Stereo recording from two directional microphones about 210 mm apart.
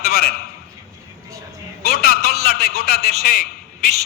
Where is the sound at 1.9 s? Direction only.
45° left (ahead or behind).